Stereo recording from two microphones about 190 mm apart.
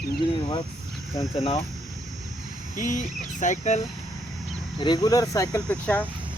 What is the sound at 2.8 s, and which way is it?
Speech, 40° left (ahead or behind).